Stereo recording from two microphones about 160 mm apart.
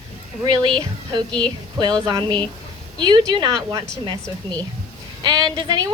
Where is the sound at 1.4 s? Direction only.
25° right (ahead or behind).